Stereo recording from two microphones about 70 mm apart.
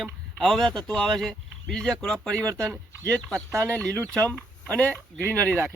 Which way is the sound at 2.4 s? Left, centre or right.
Right.